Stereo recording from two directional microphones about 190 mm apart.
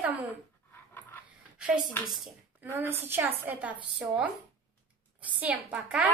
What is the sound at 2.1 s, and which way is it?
Speech, centre (ahead or behind).